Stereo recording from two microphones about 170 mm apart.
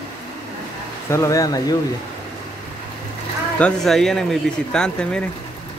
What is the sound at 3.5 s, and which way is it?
Speech, 5° left (ahead or behind).